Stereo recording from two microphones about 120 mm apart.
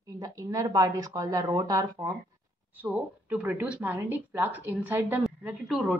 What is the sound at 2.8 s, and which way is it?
A woman's voice, 15° right (ahead or behind).